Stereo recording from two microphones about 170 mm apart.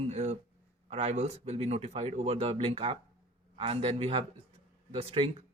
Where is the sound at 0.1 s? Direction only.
40° right (ahead or behind).